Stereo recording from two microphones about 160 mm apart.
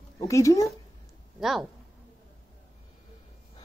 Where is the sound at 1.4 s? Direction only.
Centre (ahead or behind).